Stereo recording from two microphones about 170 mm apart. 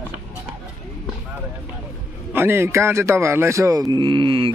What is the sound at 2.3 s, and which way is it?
A man's voice, 15° right (ahead or behind).